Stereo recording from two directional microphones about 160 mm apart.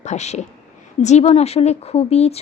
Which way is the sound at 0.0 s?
45° left (ahead or behind).